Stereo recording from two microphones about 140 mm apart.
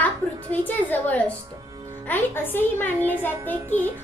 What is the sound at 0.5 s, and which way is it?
A child's voice, 10° left (ahead or behind).